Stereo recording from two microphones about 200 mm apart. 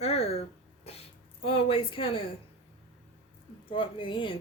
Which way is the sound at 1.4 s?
25° left (ahead or behind).